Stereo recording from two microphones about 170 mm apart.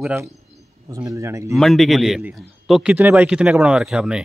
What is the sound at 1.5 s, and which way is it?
A man's voice, centre (ahead or behind).